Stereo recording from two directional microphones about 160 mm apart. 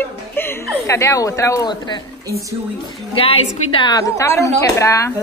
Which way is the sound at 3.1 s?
35° left (ahead or behind).